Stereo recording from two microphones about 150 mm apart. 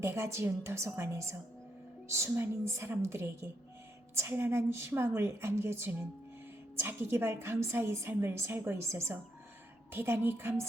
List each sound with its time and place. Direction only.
0.0 s a woman's voice: 15° right (ahead or behind)